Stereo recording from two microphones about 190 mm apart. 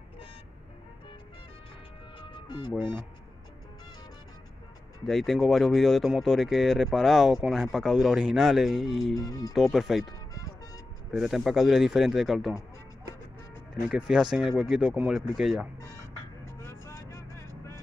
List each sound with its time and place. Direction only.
2.1 s music: 25° left (ahead or behind)
2.8 s speech: 10° right (ahead or behind)
5.0 s speech: centre (ahead or behind)
9.1 s speech: 20° left (ahead or behind)
9.5 s speech: centre (ahead or behind)
10.3 s music: 15° left (ahead or behind)
11.1 s speech: centre (ahead or behind)
13.8 s speech: 5° right (ahead or behind)
15.8 s music: 15° left (ahead or behind)